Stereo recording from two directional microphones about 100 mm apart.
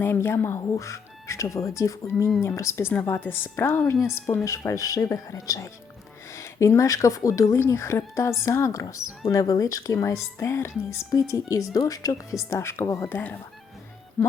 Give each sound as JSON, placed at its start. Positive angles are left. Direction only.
{"t": 0.0, "sound": "speech", "side_deg": 20}